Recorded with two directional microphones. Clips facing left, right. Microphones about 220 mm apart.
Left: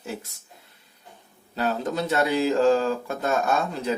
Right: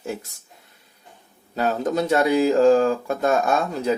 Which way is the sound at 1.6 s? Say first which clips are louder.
Right 4 dB; 45° right (ahead or behind).